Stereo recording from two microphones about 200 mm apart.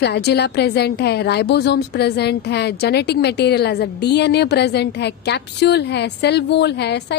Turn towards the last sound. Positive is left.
turn(degrees=55)  # may be behind; listen again after turning